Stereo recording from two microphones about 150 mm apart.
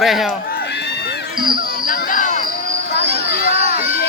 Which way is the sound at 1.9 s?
65° left (ahead or behind).